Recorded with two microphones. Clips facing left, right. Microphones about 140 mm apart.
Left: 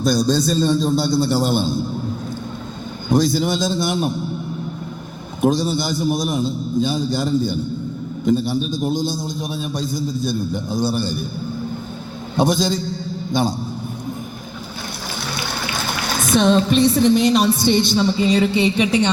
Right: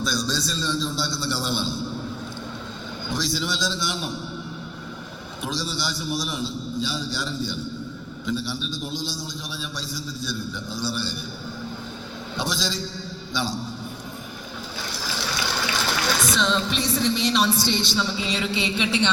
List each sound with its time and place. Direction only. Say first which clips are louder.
0.0 s speech: left 10 dB; 50° left (ahead or behind)
3.1 s speech: left 11 dB; 50° left (ahead or behind)
5.4 s speech: left 12 dB; 50° left (ahead or behind)
12.4 s speech: left 11 dB; 50° left (ahead or behind)
15.9 s speech: left 7 dB; 55° left (ahead or behind)